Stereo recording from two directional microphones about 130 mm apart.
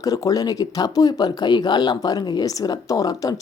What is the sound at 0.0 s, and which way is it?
Speech, 30° left (ahead or behind).